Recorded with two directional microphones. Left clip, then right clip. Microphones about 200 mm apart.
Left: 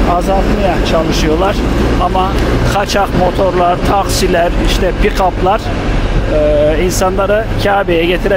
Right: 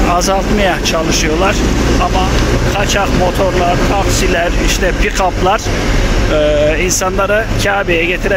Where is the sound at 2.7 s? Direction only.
25° left (ahead or behind).